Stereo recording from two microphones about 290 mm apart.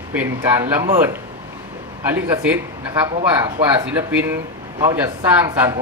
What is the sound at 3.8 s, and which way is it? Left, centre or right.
Speech, centre.